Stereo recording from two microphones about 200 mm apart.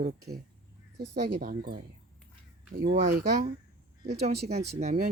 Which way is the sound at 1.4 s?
45° right (ahead or behind).